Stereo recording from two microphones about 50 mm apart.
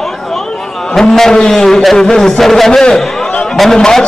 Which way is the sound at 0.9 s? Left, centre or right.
Centre.